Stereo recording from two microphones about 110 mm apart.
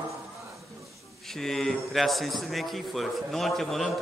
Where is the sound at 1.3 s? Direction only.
5° left (ahead or behind).